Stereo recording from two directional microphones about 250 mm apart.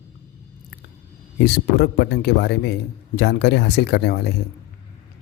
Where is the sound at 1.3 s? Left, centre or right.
Left.